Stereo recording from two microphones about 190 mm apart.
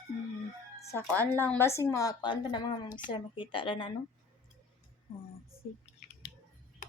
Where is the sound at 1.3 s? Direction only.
10° left (ahead or behind); by 3.9 s 25° left (ahead or behind).